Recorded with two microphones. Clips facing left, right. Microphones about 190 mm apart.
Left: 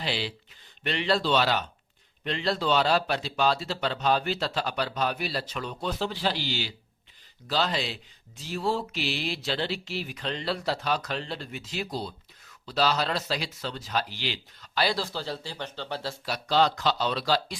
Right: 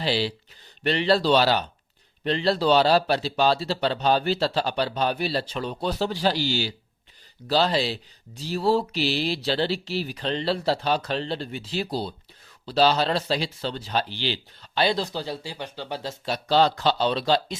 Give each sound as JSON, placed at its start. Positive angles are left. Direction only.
{"t": 0.0, "sound": "speech", "side_deg": -35}
{"t": 16.2, "sound": "speech", "side_deg": -30}